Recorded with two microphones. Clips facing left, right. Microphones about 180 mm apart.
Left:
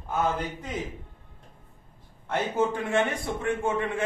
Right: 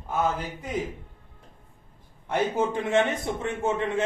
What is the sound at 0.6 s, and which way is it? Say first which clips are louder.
Speech: right 3 dB; 10° right (ahead or behind).